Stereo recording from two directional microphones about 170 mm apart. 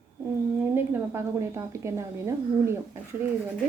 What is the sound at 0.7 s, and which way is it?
A woman's voice, 15° right (ahead or behind).